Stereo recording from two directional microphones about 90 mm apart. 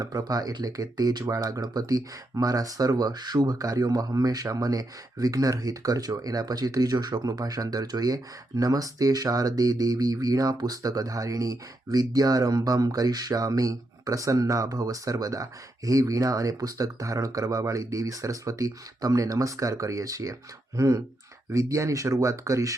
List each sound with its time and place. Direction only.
0.0 s speech: 40° right (ahead or behind)